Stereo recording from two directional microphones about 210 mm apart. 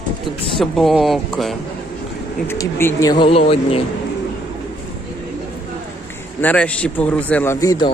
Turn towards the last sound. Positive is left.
turn(degrees=20)  # may be behind; listen again after turning